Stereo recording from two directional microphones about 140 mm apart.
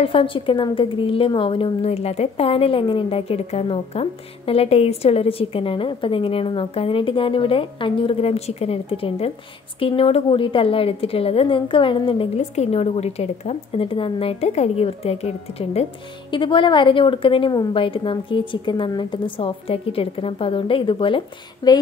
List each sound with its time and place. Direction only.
0.0 s a woman's voice: 40° left (ahead or behind)
12.4 s a woman's voice: 50° left (ahead or behind)
21.6 s a sound: 30° left (ahead or behind)